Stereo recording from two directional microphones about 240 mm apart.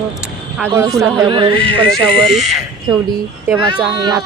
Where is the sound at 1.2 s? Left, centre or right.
Centre.